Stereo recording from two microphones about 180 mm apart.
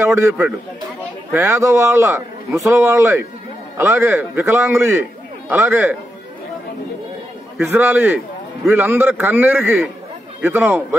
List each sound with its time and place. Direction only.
0.0 s a man's voice: 15° right (ahead or behind)
7.6 s a man's voice: 10° right (ahead or behind)